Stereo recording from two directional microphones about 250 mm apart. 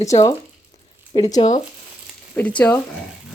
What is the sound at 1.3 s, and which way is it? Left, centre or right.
Speech, left.